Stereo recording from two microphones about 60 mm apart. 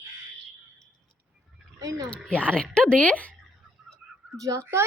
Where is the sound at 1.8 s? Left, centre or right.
Right.